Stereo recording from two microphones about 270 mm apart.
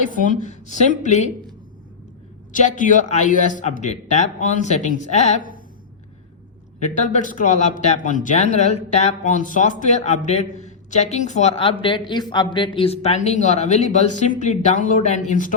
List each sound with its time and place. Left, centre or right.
0.1 s speech: left
2.5 s speech: left
6.7 s speech: left